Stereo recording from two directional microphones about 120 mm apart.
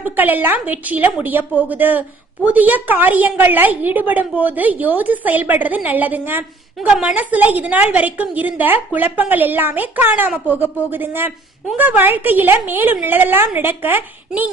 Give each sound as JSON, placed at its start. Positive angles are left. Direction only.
{"t": 0.0, "sound": "a woman's voice", "side_deg": -15}